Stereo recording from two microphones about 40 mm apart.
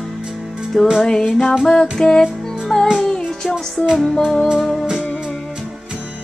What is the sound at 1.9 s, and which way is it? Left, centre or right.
Music, centre.